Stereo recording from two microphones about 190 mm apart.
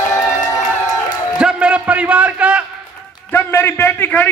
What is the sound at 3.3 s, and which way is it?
A man's voice, 10° left (ahead or behind).